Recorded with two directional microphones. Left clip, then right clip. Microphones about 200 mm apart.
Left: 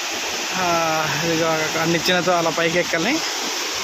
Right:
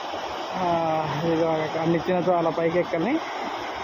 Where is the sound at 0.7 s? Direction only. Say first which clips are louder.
Left 3 dB; 15° left (ahead or behind).